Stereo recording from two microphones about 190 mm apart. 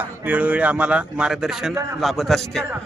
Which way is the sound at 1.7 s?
15° right (ahead or behind).